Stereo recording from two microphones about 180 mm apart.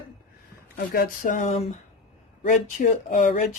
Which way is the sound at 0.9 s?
50° left (ahead or behind).